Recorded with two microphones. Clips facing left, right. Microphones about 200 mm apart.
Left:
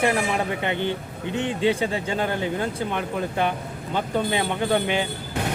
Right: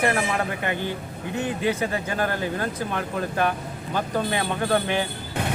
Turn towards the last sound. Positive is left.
turn(degrees=15)  # may be behind; listen again after turning